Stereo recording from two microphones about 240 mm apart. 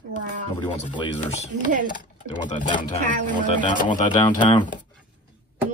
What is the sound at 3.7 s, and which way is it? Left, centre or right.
Speech, left.